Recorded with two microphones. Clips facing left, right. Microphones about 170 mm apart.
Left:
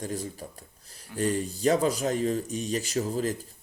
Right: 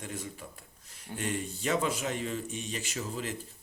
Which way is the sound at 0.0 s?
35° left (ahead or behind).